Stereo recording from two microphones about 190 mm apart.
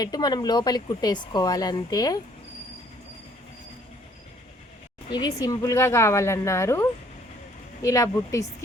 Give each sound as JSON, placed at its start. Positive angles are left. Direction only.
{"t": 0.0, "sound": "speech", "side_deg": 20}
{"t": 5.1, "sound": "speech", "side_deg": 20}